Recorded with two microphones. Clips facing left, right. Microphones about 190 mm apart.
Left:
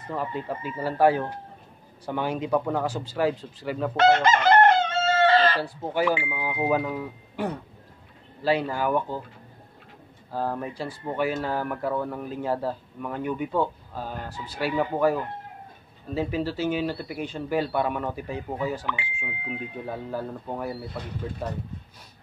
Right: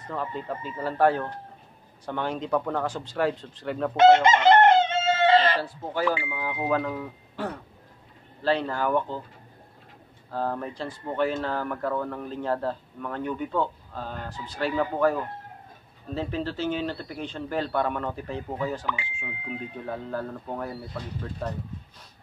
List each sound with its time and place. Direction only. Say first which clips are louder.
0.1 s speech: left 2 dB; 10° left (ahead or behind)
3.9 s chicken: right 3 dB; 20° right (ahead or behind)
5.6 s speech: left 2 dB; 15° left (ahead or behind)
10.3 s speech: even; 10° left (ahead or behind)
16.2 s speech: left 3 dB; 10° left (ahead or behind)